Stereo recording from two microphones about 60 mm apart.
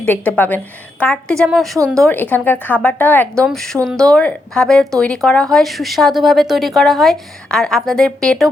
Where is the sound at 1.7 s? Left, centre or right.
Right.